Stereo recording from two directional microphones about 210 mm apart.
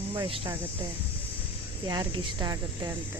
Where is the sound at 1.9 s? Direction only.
20° right (ahead or behind).